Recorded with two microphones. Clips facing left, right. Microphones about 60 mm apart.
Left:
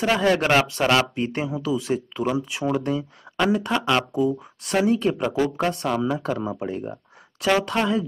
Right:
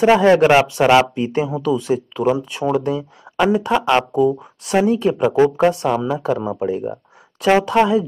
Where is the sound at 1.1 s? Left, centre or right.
Centre.